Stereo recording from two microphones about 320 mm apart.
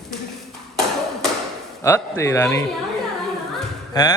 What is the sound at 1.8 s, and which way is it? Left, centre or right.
Speech, centre.